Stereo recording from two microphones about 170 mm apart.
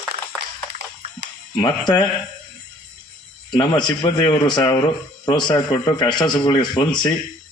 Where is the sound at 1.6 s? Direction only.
25° left (ahead or behind).